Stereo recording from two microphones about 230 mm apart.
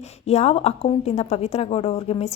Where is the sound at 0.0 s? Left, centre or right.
Left.